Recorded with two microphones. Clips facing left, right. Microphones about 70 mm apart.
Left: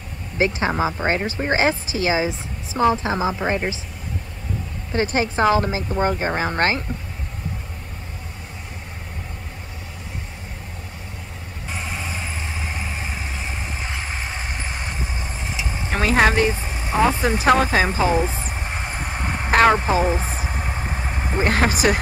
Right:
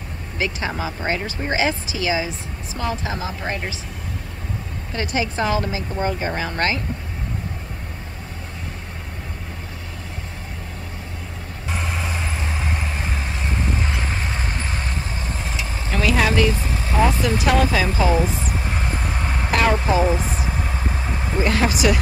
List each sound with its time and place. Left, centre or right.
0.4 s speech: left
4.9 s speech: left
11.7 s vehicle: centre
15.9 s vehicle: left
16.4 s vehicle: centre
21.4 s speech: left